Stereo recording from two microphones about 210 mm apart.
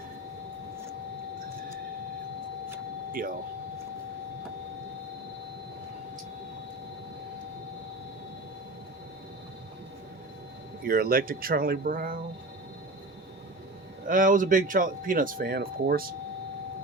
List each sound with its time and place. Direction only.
3.1 s speech: 40° right (ahead or behind)
10.8 s speech: 45° right (ahead or behind)
14.1 s speech: 40° right (ahead or behind)